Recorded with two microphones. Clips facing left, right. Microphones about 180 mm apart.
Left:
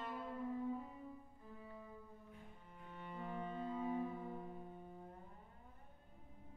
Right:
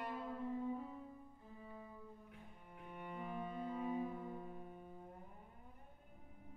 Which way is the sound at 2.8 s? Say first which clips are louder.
Right 1 dB; 15° right (ahead or behind).